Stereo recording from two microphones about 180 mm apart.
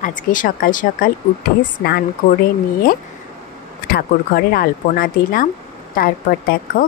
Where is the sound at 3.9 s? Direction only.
55° left (ahead or behind).